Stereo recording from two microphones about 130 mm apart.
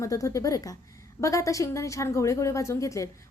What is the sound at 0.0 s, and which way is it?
A woman's voice, 25° left (ahead or behind).